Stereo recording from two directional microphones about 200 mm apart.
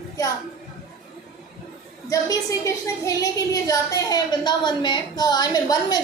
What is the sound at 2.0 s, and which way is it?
A woman's voice, 15° left (ahead or behind).